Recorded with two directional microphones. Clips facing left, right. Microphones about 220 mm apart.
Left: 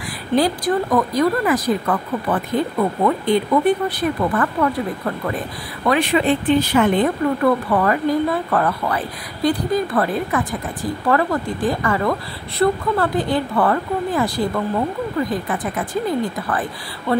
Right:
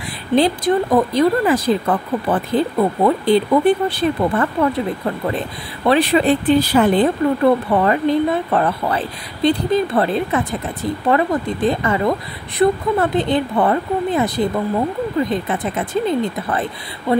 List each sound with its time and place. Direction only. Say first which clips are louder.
0.4 s speech: right 3 dB; 25° right (ahead or behind)
5.9 s speech: right 3 dB; 35° right (ahead or behind)